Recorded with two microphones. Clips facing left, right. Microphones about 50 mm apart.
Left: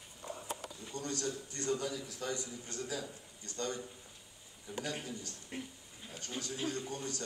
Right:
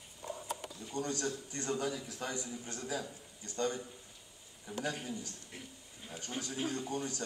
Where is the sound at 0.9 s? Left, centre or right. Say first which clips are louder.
Right 2 dB; right.